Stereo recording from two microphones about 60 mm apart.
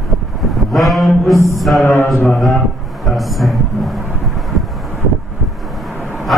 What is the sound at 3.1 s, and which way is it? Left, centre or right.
Vehicle, centre.